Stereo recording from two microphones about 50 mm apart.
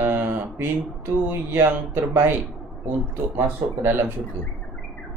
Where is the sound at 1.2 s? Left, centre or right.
Right.